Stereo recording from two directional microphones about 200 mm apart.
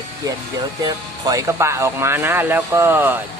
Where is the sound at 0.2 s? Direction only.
15° right (ahead or behind).